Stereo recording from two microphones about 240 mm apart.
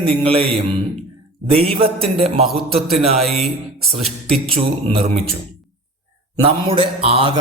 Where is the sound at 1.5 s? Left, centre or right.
Right.